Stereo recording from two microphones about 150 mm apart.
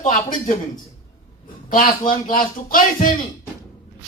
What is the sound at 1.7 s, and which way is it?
Speech, 65° left (ahead or behind).